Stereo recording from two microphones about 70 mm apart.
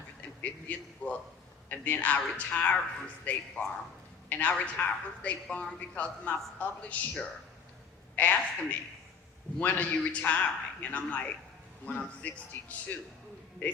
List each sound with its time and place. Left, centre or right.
0.2 s a sound: left
1.7 s a man's voice: left
9.6 s a man's voice: left